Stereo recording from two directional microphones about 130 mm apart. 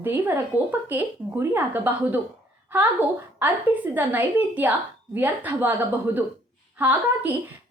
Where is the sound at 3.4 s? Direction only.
15° right (ahead or behind).